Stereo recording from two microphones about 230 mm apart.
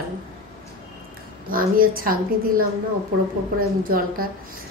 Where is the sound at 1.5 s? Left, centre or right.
Right.